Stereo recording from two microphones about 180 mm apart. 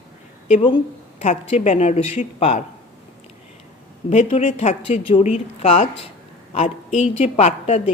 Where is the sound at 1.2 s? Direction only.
40° left (ahead or behind).